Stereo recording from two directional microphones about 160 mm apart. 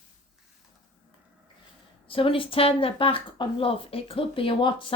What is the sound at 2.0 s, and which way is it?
Speech, 35° left (ahead or behind).